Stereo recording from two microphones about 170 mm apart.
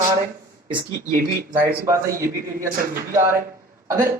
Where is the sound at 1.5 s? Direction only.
15° right (ahead or behind).